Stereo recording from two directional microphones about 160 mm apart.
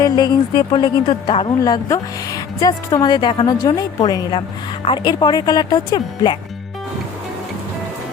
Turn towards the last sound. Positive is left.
turn(degrees=25)  # may be behind; listen again after turning